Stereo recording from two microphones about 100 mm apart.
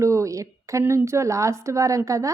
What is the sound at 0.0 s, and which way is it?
A woman's voice, 30° right (ahead or behind).